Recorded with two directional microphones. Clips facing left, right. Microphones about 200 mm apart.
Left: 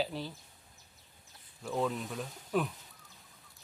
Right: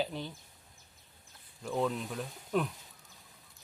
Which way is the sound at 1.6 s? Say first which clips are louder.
Right 1 dB; centre (ahead or behind).